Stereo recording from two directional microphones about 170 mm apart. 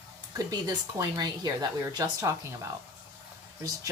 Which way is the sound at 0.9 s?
20° right (ahead or behind).